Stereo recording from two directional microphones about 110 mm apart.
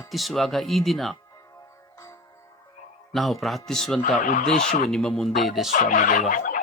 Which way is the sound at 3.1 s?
Centre (ahead or behind).